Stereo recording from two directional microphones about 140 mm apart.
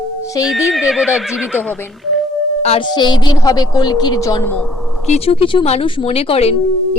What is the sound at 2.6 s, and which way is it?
Speech, 45° left (ahead or behind).